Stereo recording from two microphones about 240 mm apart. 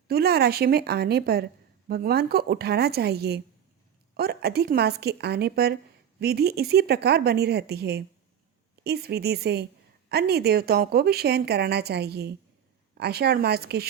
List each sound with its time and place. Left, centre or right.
0.1 s a woman's voice: right